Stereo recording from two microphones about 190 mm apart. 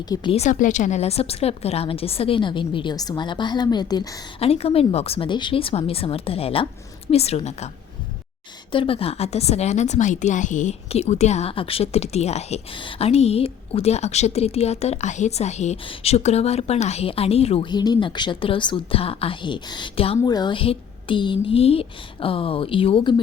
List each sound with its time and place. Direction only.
0.0 s a woman's voice: 25° left (ahead or behind)
4.4 s a woman's voice: 30° left (ahead or behind)
8.7 s a woman's voice: 30° left (ahead or behind)